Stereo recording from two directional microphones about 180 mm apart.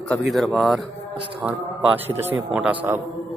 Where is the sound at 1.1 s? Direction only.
30° right (ahead or behind).